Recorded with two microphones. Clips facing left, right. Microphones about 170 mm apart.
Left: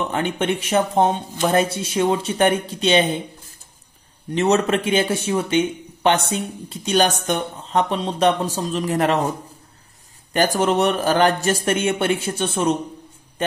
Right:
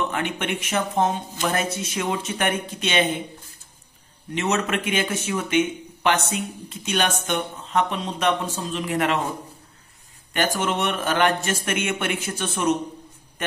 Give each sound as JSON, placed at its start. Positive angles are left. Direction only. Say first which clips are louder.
{"t": 0.1, "sound": "speech", "louder": "left 5 dB", "side_deg": 30}
{"t": 4.3, "sound": "speech", "louder": "left 6 dB", "side_deg": 35}
{"t": 10.3, "sound": "speech", "louder": "left 6 dB", "side_deg": 35}